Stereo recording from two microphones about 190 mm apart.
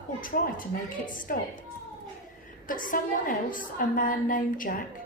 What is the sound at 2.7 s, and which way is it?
A woman's voice, 45° left (ahead or behind).